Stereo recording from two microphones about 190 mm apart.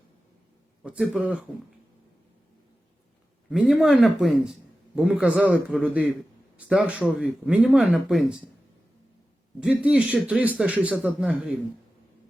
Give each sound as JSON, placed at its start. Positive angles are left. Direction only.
{"t": 0.8, "sound": "speech", "side_deg": -5}
{"t": 3.5, "sound": "speech", "side_deg": 0}
{"t": 9.6, "sound": "a man's voice", "side_deg": -5}